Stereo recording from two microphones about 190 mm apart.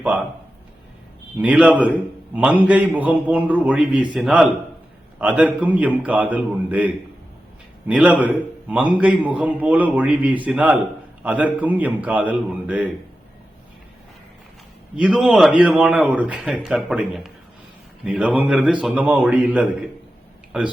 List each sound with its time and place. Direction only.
0.0 s a man's voice: 5° right (ahead or behind)
1.4 s a man's voice: 5° right (ahead or behind)
14.9 s a man's voice: 5° right (ahead or behind)